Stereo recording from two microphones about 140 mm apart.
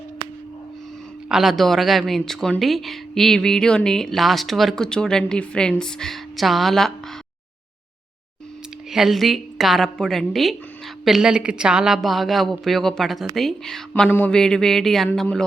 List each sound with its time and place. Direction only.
1.3 s speech: centre (ahead or behind)
8.9 s speech: centre (ahead or behind)